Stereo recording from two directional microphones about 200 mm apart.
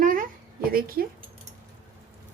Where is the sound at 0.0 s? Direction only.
40° right (ahead or behind).